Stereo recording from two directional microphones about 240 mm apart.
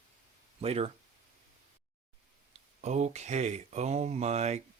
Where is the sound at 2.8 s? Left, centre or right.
Right.